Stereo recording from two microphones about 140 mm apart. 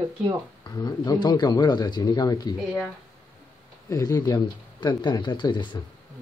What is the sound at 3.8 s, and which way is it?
Speech, 25° left (ahead or behind).